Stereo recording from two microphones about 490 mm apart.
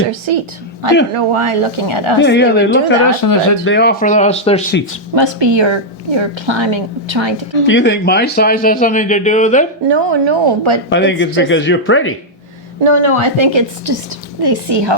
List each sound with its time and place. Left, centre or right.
0.1 s a woman's voice: right
2.2 s speech: left
3.2 s speech: left
3.6 s speech: left
5.1 s a woman's voice: right
7.7 s speech: left
9.9 s a woman's voice: right
10.8 s speech: left
12.8 s a woman's voice: right
14.4 s a woman's voice: right